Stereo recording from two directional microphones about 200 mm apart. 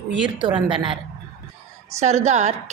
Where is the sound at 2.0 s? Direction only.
35° right (ahead or behind).